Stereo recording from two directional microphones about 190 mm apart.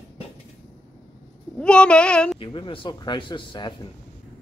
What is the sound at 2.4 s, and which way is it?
Speech, 25° left (ahead or behind).